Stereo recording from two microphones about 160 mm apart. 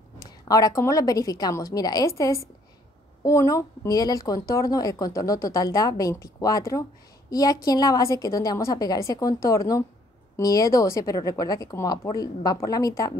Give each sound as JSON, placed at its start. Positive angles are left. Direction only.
{"t": 0.5, "sound": "speech", "side_deg": 20}